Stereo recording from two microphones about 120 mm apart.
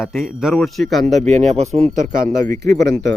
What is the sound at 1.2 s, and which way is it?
Speech, 70° right (ahead or behind).